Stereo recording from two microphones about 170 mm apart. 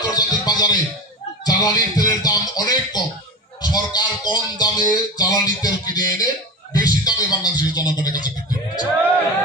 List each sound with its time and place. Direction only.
0.0 s music: 25° left (ahead or behind)